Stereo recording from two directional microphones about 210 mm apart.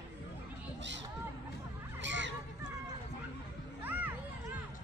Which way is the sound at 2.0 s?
60° right (ahead or behind).